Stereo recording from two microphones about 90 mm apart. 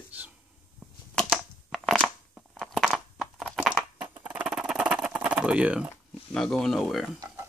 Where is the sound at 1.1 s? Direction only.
5° left (ahead or behind).